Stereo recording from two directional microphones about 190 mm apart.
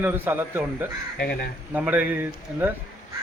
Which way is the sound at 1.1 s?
55° left (ahead or behind).